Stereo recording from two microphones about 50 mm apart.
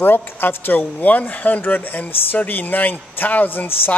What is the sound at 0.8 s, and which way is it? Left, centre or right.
Speech, left.